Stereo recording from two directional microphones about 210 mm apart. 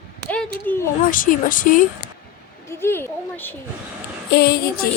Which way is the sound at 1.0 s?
40° left (ahead or behind).